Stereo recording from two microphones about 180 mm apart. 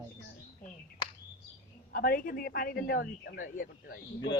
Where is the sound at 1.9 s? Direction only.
55° left (ahead or behind).